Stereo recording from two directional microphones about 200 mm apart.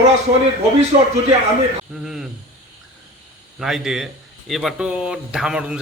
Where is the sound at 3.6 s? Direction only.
Centre (ahead or behind).